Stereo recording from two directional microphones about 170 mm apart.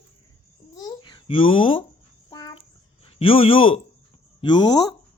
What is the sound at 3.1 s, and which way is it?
A man's voice, 35° left (ahead or behind).